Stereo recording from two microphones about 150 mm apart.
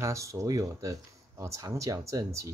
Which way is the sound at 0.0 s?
20° right (ahead or behind).